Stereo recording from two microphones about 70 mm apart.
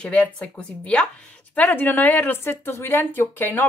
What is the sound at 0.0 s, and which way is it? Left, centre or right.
A woman's voice, centre.